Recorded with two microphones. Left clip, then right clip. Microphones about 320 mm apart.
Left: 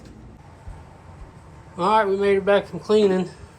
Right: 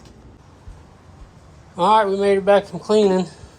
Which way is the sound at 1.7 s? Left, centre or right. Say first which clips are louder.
Right 3 dB; centre.